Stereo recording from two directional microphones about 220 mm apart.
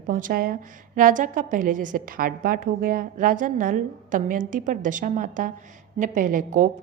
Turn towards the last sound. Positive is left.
turn(degrees=-35)  # may be behind; listen again after turning